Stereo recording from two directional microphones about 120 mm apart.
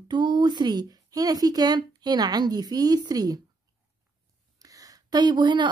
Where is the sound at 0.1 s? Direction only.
40° right (ahead or behind).